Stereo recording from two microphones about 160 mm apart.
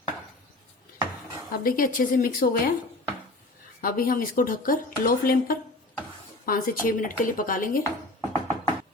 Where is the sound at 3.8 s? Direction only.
65° left (ahead or behind).